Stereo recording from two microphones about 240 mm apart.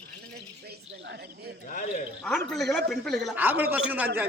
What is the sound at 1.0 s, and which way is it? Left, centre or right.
Speech, right.